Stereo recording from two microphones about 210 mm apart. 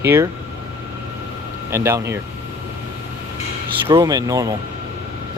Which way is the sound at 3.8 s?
15° right (ahead or behind).